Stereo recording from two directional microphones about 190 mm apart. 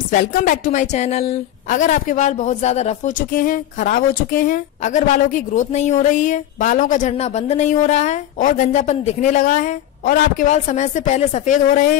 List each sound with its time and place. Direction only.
0.1 s a woman's voice: 50° left (ahead or behind)